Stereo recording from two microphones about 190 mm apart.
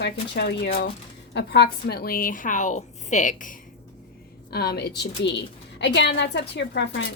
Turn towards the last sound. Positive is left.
turn(degrees=65)  # may be behind; listen again after turning